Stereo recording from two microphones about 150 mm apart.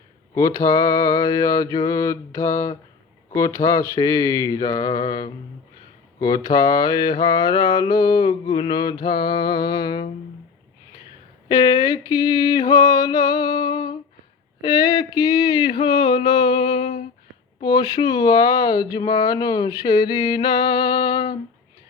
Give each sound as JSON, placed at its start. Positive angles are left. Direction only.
{"t": 0.3, "sound": "mantra", "side_deg": 25}
{"t": 11.4, "sound": "mantra", "side_deg": 25}
{"t": 14.6, "sound": "a sound", "side_deg": 25}
{"t": 17.6, "sound": "mantra", "side_deg": 25}